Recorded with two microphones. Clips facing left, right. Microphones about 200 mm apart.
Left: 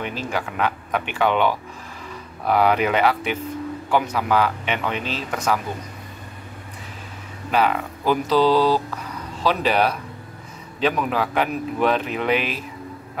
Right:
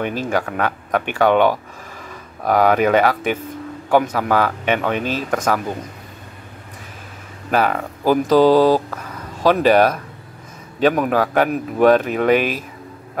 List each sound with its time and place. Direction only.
0.0 s a man's voice: 50° right (ahead or behind)
7.5 s a man's voice: 45° right (ahead or behind)